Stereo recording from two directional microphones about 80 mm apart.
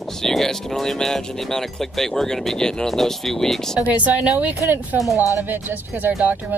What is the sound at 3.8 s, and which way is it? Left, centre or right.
A woman's voice, centre.